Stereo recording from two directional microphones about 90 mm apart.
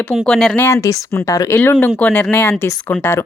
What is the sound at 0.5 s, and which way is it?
Speech, 25° left (ahead or behind).